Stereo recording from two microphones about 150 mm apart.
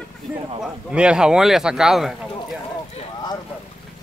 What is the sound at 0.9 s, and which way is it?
Speech, 5° right (ahead or behind).